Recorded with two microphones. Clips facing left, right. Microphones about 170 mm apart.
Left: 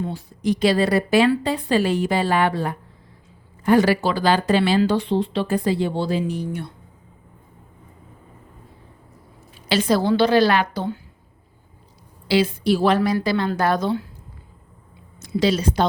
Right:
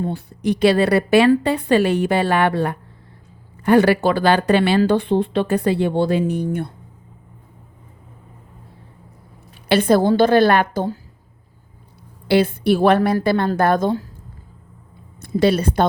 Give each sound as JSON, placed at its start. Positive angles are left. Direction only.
{"t": 0.0, "sound": "speech", "side_deg": -60}
{"t": 9.6, "sound": "a woman's voice", "side_deg": -55}
{"t": 12.3, "sound": "a woman's voice", "side_deg": -55}
{"t": 15.2, "sound": "speech", "side_deg": -55}